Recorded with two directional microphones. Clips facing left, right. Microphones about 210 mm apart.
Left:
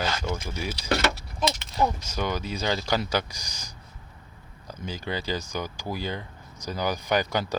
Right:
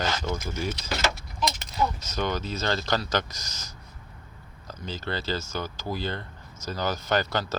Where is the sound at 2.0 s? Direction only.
10° left (ahead or behind).